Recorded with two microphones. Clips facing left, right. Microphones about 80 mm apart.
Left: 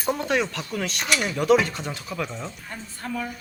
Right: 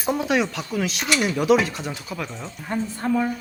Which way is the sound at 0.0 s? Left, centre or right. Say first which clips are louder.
Right 2 dB; centre.